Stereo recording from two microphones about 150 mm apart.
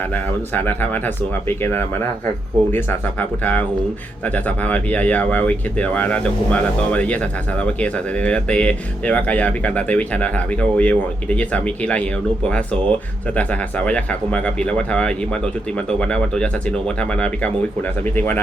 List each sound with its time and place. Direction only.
0.1 s speech: 10° left (ahead or behind)